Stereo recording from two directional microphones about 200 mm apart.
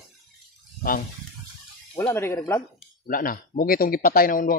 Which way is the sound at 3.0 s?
45° left (ahead or behind).